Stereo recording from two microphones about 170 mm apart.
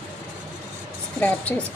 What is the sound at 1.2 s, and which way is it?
Speech, 10° left (ahead or behind).